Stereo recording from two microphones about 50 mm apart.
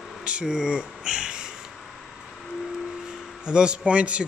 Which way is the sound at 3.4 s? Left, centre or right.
Centre.